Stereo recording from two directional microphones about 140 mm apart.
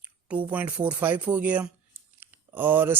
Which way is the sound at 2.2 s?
15° right (ahead or behind).